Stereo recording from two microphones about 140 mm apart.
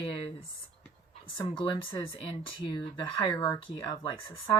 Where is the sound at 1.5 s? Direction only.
40° left (ahead or behind).